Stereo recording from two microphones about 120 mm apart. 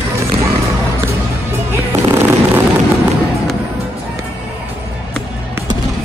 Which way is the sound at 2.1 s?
15° right (ahead or behind).